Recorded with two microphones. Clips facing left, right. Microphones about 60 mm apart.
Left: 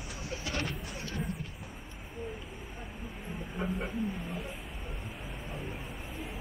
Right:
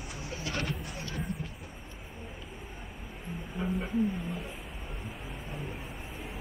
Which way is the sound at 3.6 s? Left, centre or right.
Centre.